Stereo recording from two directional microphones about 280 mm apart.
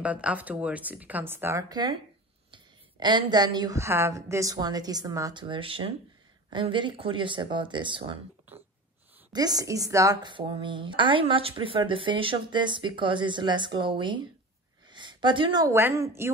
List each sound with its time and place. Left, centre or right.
0.0 s a woman's voice: centre
8.5 s a sound: centre
9.3 s a woman's voice: centre